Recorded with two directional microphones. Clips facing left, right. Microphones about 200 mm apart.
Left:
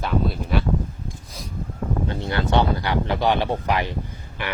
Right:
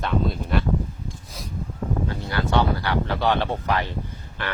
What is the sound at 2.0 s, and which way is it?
Speech, 20° left (ahead or behind).